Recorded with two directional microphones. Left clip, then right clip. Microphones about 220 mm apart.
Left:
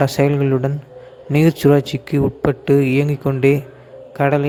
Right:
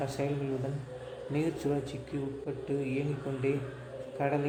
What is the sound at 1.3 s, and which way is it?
Speech, 45° left (ahead or behind).